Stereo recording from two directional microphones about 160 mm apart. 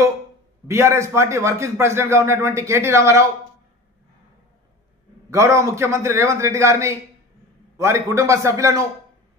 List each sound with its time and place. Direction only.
0.7 s a man's voice: 15° right (ahead or behind)
5.3 s a man's voice: 20° right (ahead or behind)